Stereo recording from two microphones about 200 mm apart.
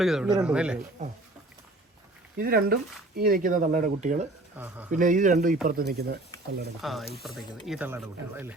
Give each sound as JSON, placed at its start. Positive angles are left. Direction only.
{"t": 0.0, "sound": "speech", "side_deg": 0}
{"t": 1.0, "sound": "speech", "side_deg": -35}
{"t": 2.4, "sound": "speech", "side_deg": -50}
{"t": 4.5, "sound": "speech", "side_deg": -10}
{"t": 4.9, "sound": "speech", "side_deg": -40}
{"t": 6.8, "sound": "speech", "side_deg": 0}